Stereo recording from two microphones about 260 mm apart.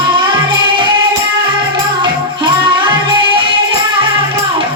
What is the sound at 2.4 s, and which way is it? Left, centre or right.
Music, centre.